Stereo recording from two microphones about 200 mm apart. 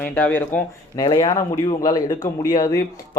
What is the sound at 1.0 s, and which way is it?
Speech, 20° left (ahead or behind).